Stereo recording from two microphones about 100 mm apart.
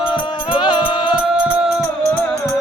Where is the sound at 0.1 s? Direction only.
55° left (ahead or behind).